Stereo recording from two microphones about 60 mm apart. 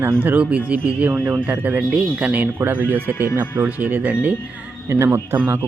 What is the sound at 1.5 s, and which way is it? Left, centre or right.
Speech, right.